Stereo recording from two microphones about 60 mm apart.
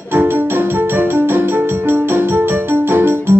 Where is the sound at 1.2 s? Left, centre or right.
Right.